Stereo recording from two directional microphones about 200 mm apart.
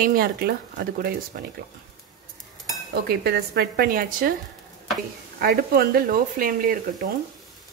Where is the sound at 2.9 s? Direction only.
55° right (ahead or behind).